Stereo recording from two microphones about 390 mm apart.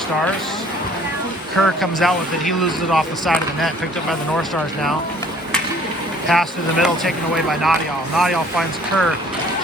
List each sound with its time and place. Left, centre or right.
1.6 s speech: centre
6.2 s speech: centre